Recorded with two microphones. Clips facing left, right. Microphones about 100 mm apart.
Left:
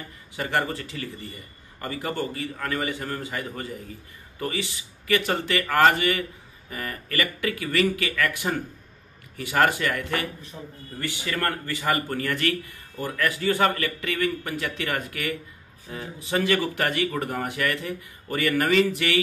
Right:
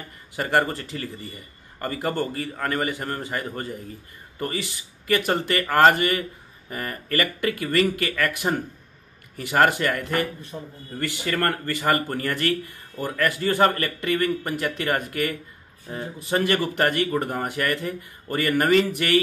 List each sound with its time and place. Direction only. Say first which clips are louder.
0.4 s speech: right 4 dB; 45° right (ahead or behind)
5.0 s speech: right 2 dB; 45° right (ahead or behind)
9.6 s speech: right 2 dB; 40° right (ahead or behind)